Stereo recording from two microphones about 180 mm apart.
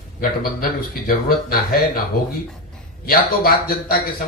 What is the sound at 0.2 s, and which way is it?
Speech, 55° left (ahead or behind).